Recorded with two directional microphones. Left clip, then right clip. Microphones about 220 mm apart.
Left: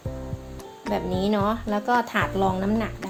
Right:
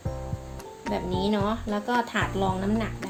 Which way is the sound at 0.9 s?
25° left (ahead or behind).